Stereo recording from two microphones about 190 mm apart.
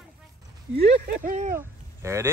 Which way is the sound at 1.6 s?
15° right (ahead or behind).